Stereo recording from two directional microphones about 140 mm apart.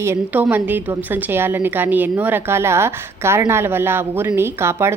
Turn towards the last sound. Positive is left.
turn(degrees=-20)  # may be behind; listen again after turning